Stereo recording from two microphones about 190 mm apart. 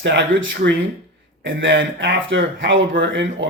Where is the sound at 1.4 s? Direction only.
80° right.